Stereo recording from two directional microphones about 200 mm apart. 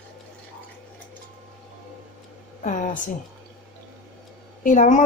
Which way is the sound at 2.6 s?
40° left (ahead or behind).